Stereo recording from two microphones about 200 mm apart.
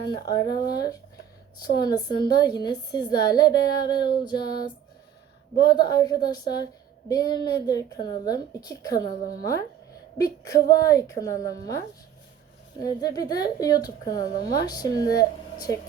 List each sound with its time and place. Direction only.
0.3 s a woman's voice: 20° left (ahead or behind)
5.6 s a woman's voice: 20° left (ahead or behind)
10.2 s speech: 20° left (ahead or behind)
12.8 s a woman's voice: 20° left (ahead or behind)